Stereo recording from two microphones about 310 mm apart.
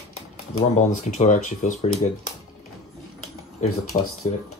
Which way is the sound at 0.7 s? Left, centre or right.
Left.